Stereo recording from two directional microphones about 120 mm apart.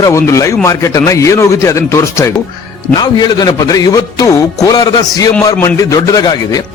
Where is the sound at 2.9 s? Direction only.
35° left (ahead or behind).